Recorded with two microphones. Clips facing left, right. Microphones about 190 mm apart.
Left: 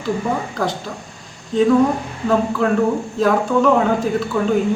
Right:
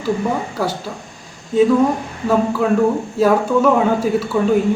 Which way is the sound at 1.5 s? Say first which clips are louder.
Right 3 dB; 5° right (ahead or behind).